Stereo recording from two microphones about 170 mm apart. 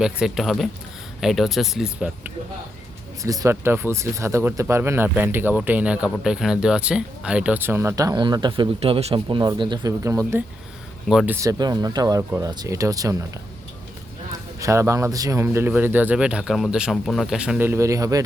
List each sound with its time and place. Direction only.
0.0 s speech: 5° right (ahead or behind)
3.2 s speech: 20° right (ahead or behind)
11.1 s speech: 5° right (ahead or behind)
11.3 s speech: 20° right (ahead or behind)
14.6 s speech: 15° right (ahead or behind)